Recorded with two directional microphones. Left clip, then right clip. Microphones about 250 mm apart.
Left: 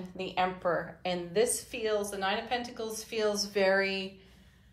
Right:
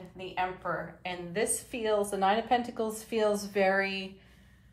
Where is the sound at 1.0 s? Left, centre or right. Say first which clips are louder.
Left 4 dB; centre.